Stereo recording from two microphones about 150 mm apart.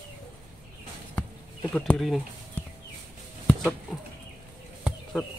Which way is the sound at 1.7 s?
5° left (ahead or behind).